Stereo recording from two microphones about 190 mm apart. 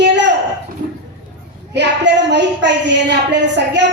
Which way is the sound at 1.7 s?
65° right (ahead or behind).